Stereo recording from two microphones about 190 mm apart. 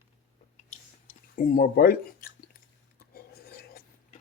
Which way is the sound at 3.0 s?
55° left (ahead or behind).